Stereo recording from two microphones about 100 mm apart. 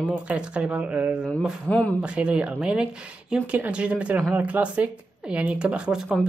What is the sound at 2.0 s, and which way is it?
Speech, 10° right (ahead or behind).